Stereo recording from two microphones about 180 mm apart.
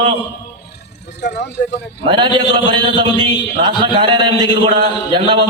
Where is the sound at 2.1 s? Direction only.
25° right (ahead or behind).